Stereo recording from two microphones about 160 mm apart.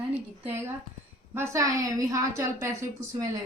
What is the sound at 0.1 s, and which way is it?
A woman's voice, 10° right (ahead or behind).